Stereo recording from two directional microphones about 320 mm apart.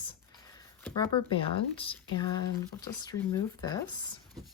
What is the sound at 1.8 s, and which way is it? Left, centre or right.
Speech, centre.